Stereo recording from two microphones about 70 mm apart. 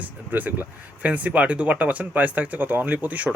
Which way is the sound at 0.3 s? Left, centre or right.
Right.